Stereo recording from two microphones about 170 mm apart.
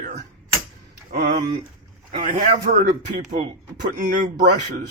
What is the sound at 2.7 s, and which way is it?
Speech, 50° right (ahead or behind).